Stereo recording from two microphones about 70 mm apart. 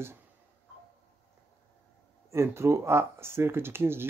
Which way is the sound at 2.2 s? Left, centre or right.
Right.